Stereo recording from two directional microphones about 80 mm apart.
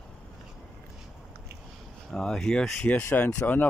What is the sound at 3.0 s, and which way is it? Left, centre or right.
Speech, left.